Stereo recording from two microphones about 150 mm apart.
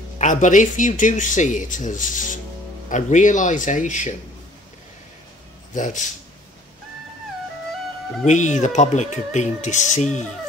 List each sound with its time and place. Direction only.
0.2 s speech: 55° left (ahead or behind)
5.8 s speech: 55° left (ahead or behind)
8.3 s speech: 50° left (ahead or behind)